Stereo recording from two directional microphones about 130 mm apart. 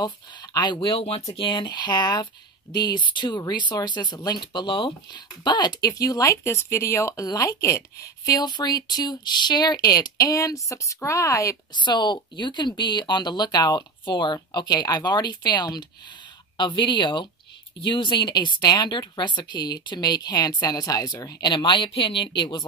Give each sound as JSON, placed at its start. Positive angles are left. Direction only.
{"t": 0.0, "sound": "speech", "side_deg": 30}
{"t": 1.3, "sound": "speech", "side_deg": 40}
{"t": 11.8, "sound": "speech", "side_deg": 35}